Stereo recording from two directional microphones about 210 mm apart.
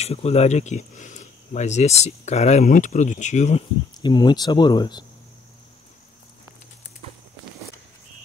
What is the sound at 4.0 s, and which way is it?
Speech, 20° left (ahead or behind).